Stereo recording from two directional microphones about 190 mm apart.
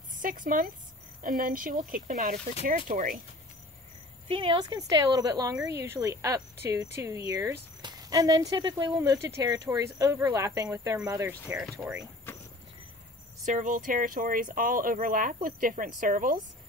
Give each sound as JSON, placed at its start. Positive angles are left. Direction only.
{"t": 0.1, "sound": "a woman's voice", "side_deg": -45}
{"t": 4.3, "sound": "speech", "side_deg": -25}
{"t": 13.5, "sound": "speech", "side_deg": -45}